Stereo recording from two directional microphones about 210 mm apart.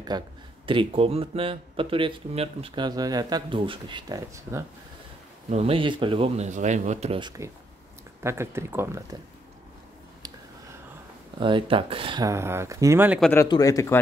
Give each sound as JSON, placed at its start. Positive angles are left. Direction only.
{"t": 0.1, "sound": "speech", "side_deg": -20}
{"t": 5.5, "sound": "speech", "side_deg": -30}
{"t": 11.3, "sound": "speech", "side_deg": -25}
{"t": 13.2, "sound": "speech", "side_deg": 10}